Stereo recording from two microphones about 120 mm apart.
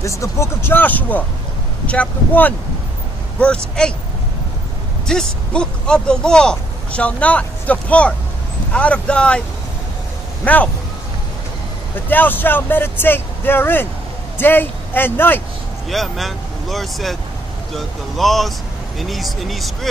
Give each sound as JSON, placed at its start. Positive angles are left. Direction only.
{"t": 0.0, "sound": "speech", "side_deg": 25}
{"t": 5.0, "sound": "speech", "side_deg": 5}
{"t": 10.4, "sound": "speech", "side_deg": 10}
{"t": 12.1, "sound": "speech", "side_deg": 15}
{"t": 15.9, "sound": "speech", "side_deg": 0}